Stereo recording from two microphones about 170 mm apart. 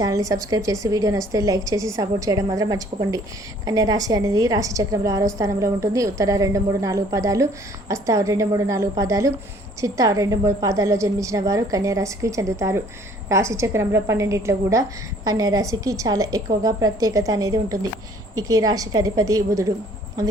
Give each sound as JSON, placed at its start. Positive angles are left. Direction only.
{"t": 0.0, "sound": "a woman's voice", "side_deg": -20}